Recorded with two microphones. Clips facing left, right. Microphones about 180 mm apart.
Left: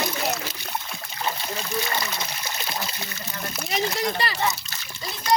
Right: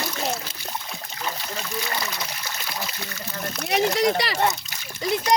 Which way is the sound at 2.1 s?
25° left (ahead or behind).